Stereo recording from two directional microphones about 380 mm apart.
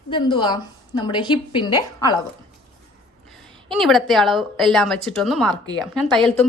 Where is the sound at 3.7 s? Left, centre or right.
Centre.